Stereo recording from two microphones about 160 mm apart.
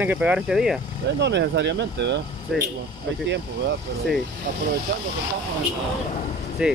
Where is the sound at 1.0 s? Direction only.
90° right.